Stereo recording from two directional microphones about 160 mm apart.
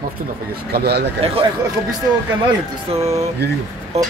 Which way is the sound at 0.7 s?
85° right.